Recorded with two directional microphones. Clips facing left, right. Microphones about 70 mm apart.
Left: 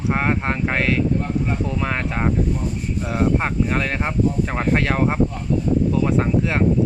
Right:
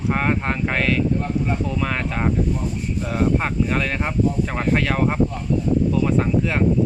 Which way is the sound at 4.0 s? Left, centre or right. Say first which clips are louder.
Even; centre.